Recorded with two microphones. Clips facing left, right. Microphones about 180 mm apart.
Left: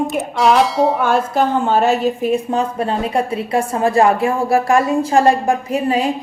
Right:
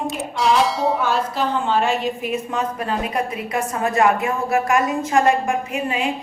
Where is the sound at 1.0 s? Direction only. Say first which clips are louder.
Left 5 dB; 50° left (ahead or behind).